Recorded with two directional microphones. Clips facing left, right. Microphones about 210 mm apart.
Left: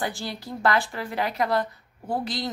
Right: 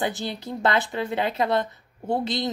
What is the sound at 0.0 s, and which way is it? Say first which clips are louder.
Speech: right 3 dB; 20° right (ahead or behind).